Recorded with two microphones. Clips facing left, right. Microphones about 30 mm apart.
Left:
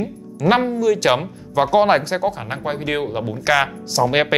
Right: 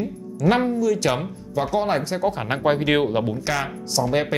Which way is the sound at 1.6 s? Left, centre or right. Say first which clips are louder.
Left 7 dB; left.